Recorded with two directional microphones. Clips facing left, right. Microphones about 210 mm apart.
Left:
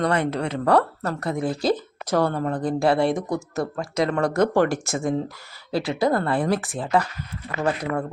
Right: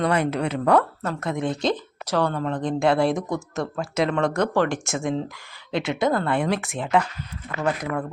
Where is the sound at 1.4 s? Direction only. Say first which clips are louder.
Left 2 dB; 5° left (ahead or behind).